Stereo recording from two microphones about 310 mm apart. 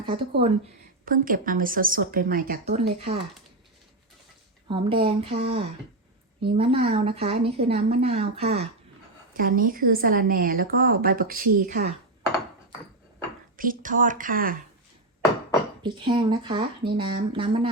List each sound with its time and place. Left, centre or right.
0.1 s speech: centre
4.7 s speech: centre
13.6 s speech: right
15.8 s speech: centre